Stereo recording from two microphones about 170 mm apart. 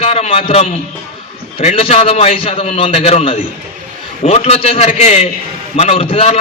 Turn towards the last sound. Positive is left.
turn(degrees=35)  # may be behind; listen again after turning